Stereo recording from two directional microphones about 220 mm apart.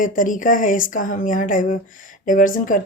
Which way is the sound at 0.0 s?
35° left (ahead or behind).